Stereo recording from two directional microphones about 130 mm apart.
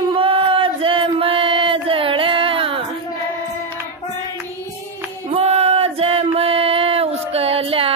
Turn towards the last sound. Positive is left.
turn(degrees=-45)  # may be behind; listen again after turning